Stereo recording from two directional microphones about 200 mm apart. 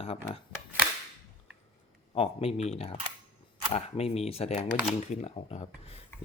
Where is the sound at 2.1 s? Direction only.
30° left (ahead or behind).